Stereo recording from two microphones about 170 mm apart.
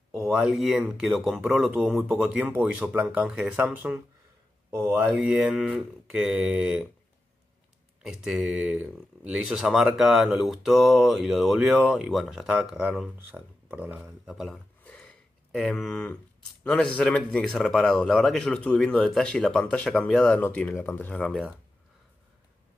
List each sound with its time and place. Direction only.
0.1 s speech: centre (ahead or behind)
8.0 s speech: centre (ahead or behind)
14.8 s a sound: 10° left (ahead or behind)
16.6 s speech: 5° left (ahead or behind)